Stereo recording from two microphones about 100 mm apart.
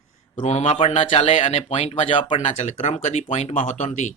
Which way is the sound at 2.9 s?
90° left.